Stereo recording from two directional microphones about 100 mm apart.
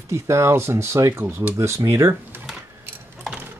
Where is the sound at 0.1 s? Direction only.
30° right (ahead or behind).